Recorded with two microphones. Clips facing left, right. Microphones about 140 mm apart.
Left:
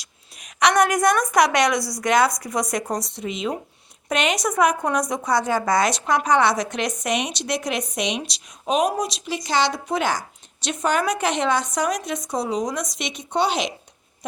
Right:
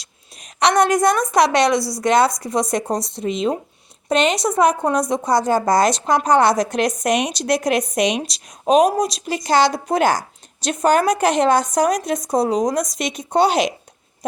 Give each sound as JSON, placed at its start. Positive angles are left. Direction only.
{"t": 0.0, "sound": "a woman's voice", "side_deg": -35}